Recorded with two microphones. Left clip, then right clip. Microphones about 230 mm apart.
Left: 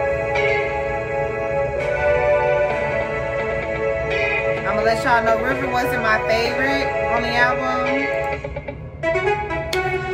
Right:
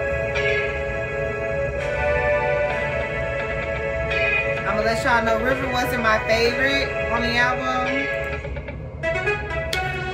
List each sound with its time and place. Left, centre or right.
2.0 s music: left
4.8 s speech: centre